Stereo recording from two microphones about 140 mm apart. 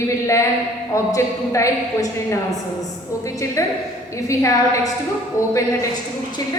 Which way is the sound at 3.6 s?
20° left (ahead or behind).